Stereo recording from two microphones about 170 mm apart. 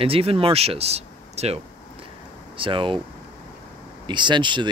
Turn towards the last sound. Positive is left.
turn(degrees=-30)  # may be behind; listen again after turning